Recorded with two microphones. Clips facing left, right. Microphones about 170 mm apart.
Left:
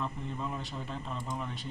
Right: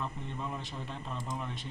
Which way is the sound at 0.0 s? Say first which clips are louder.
Left 2 dB; centre (ahead or behind).